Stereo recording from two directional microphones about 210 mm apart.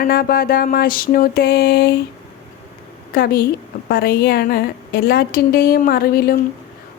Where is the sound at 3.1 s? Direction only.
45° left (ahead or behind).